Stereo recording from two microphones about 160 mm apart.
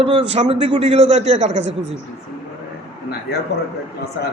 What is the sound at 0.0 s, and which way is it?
A man's voice, 40° right (ahead or behind).